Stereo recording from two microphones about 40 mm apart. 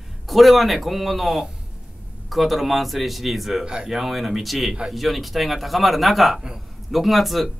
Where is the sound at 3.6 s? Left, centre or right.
Centre.